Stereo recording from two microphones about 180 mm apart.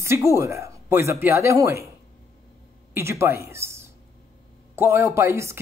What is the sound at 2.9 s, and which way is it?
A woman's voice, 15° right (ahead or behind).